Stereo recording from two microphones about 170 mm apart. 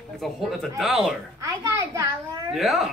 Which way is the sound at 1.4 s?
20° right (ahead or behind).